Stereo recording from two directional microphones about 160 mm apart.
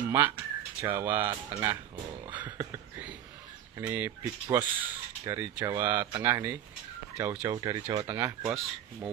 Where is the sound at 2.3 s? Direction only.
10° right (ahead or behind).